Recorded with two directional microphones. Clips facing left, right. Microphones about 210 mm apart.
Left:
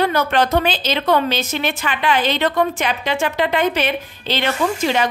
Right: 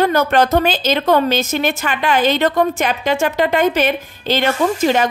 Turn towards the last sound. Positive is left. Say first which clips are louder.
# right 3 dB
turn(degrees=-45)  # may be behind; listen again after turning